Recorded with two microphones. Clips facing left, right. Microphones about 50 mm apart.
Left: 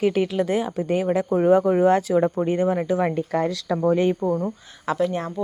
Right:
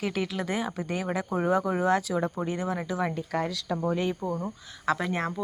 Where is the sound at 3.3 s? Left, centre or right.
Left.